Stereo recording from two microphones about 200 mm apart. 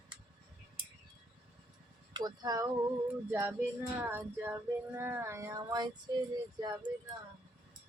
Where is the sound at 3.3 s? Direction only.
10° right (ahead or behind).